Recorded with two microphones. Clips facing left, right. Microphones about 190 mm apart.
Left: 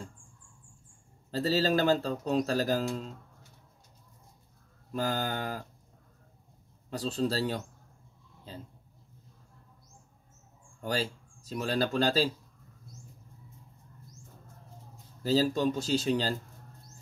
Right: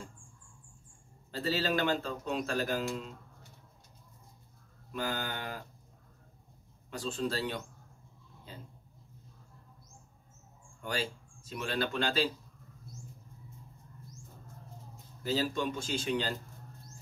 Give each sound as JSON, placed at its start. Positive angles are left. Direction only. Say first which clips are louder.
{"t": 1.3, "sound": "speech", "louder": "left 5 dB", "side_deg": 40}
{"t": 4.9, "sound": "speech", "louder": "left 5 dB", "side_deg": 40}
{"t": 6.9, "sound": "speech", "louder": "left 4 dB", "side_deg": 40}
{"t": 10.8, "sound": "speech", "louder": "left 4 dB", "side_deg": 40}
{"t": 15.2, "sound": "speech", "louder": "left 6 dB", "side_deg": 40}